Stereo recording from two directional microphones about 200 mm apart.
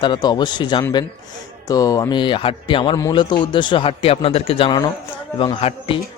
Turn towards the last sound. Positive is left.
turn(degrees=25)  # may be behind; listen again after turning